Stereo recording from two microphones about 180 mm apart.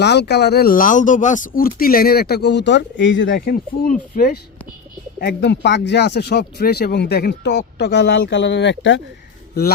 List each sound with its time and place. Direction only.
0.0 s speech: 70° left (ahead or behind); by 4.4 s 50° left (ahead or behind)
5.2 s speech: 75° left (ahead or behind)